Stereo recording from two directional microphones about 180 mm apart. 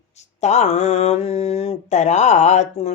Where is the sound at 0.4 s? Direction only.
40° left (ahead or behind).